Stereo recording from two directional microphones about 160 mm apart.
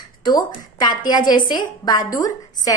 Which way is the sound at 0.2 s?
25° left (ahead or behind).